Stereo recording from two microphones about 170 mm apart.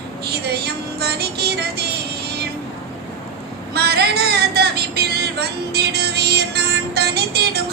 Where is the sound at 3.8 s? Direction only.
70° right (ahead or behind).